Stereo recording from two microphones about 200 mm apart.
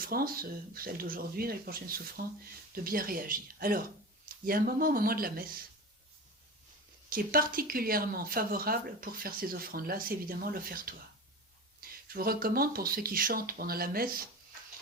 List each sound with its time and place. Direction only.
0.0 s speech: 45° right (ahead or behind)
7.1 s speech: 45° right (ahead or behind)